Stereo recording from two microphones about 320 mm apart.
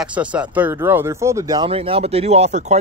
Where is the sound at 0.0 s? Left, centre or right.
Centre.